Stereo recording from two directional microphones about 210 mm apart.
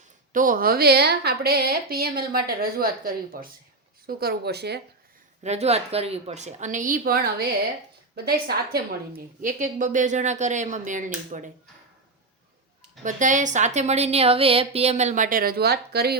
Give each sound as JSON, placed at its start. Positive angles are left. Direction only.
{"t": 0.3, "sound": "a woman's voice", "side_deg": -40}
{"t": 5.4, "sound": "a woman's voice", "side_deg": -30}
{"t": 13.0, "sound": "a woman's voice", "side_deg": -35}